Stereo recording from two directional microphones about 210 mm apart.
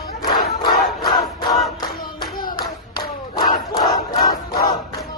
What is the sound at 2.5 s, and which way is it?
Hands, 20° left (ahead or behind).